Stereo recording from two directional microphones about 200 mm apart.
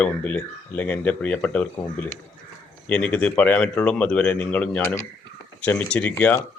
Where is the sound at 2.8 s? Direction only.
5° left (ahead or behind).